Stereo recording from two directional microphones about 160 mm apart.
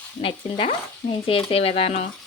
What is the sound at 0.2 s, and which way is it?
Speech, 35° left (ahead or behind).